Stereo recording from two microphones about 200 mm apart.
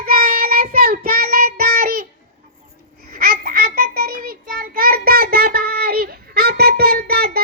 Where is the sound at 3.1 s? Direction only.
50° right (ahead or behind).